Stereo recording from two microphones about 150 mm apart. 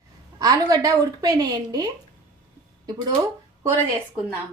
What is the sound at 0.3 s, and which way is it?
A woman's voice, 25° right (ahead or behind).